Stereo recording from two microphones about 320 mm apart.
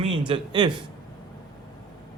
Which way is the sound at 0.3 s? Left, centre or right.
Centre.